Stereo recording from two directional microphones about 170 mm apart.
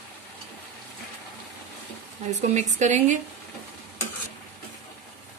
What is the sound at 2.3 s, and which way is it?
Speech, 40° right (ahead or behind).